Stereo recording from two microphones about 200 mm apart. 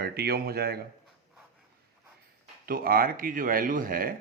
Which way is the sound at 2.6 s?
50° right (ahead or behind).